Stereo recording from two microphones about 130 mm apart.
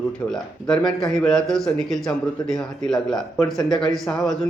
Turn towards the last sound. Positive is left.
turn(degrees=5)  # may be behind; listen again after turning